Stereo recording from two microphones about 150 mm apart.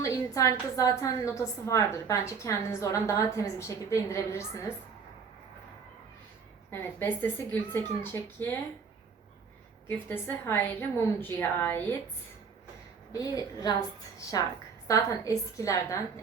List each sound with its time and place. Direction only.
0.0 s a sound: 20° left (ahead or behind)
0.8 s a woman's voice: 20° left (ahead or behind)
6.7 s a woman's voice: 15° left (ahead or behind)
10.1 s a woman's voice: 15° left (ahead or behind)
13.1 s a woman's voice: 25° left (ahead or behind)
14.8 s a woman's voice: 20° left (ahead or behind)